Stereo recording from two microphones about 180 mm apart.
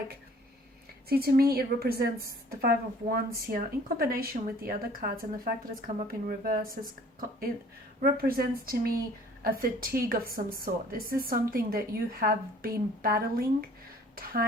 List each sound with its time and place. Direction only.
1.1 s a woman's voice: 55° right (ahead or behind)